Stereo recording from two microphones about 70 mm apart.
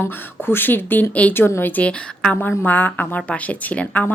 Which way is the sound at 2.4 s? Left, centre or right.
Left.